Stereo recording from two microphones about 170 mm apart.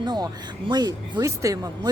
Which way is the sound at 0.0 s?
25° right (ahead or behind).